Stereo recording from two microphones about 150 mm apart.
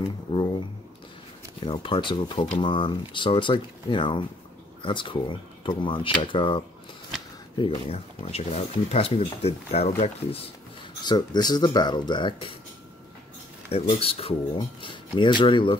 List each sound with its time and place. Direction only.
0.3 s a sound: 35° left (ahead or behind)
1.7 s speech: 35° left (ahead or behind)
11.1 s speech: 25° left (ahead or behind)
13.7 s speech: 40° left (ahead or behind)